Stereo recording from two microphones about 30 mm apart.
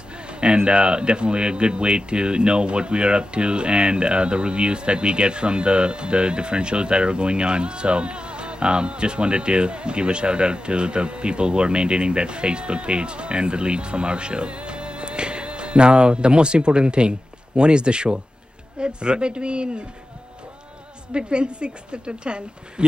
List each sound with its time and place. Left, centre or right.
0.3 s speech: right
21.1 s speech: right